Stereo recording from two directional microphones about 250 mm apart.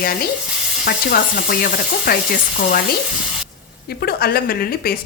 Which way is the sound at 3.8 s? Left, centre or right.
Left.